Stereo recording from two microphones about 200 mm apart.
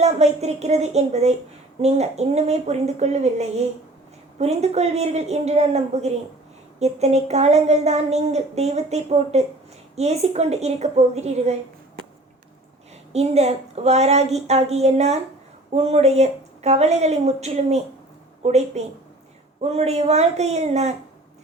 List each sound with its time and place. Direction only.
0.0 s speech: 35° right (ahead or behind)
13.1 s speech: 30° right (ahead or behind)